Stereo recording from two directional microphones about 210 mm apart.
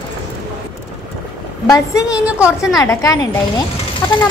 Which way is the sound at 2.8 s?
15° left (ahead or behind).